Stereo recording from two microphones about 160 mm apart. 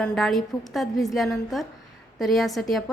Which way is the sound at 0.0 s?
5° left (ahead or behind).